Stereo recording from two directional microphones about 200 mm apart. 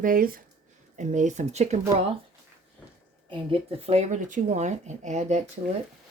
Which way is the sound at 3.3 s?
30° right (ahead or behind).